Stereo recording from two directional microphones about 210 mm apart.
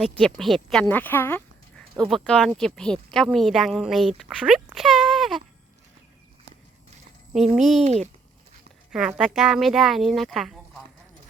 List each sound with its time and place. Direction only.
0.2 s speech: centre (ahead or behind)
7.3 s speech: centre (ahead or behind)
7.9 s speech: 35° right (ahead or behind)
8.9 s speech: 5° right (ahead or behind)